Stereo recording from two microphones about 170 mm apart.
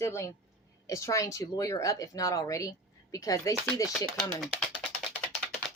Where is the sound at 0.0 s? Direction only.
15° left (ahead or behind).